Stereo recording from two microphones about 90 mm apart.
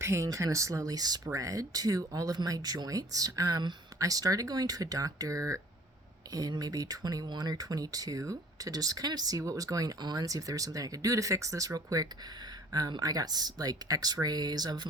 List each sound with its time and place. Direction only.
0.0 s speech: 35° right (ahead or behind); by 14.8 s 50° right (ahead or behind)